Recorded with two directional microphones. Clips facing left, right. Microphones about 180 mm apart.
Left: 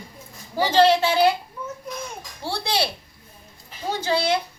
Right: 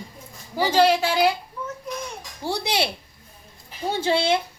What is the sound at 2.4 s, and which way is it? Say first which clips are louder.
Speech: right 1 dB; 20° right (ahead or behind).